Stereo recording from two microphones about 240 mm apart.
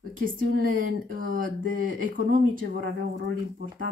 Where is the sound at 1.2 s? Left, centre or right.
Right.